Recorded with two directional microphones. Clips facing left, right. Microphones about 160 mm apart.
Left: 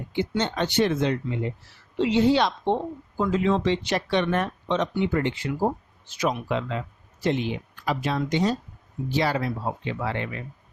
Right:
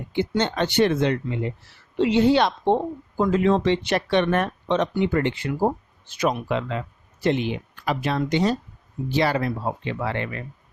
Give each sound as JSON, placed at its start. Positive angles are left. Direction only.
{"t": 0.1, "sound": "speech", "side_deg": -60}